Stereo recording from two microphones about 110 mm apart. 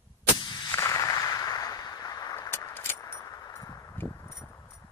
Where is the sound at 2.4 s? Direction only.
25° left (ahead or behind).